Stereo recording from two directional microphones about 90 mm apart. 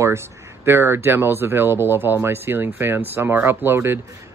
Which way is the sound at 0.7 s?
25° right (ahead or behind).